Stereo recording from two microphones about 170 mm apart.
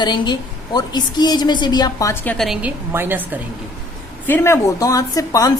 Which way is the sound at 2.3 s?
Centre (ahead or behind).